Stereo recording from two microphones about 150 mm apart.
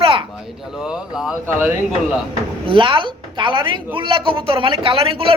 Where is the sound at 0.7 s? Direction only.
5° right (ahead or behind).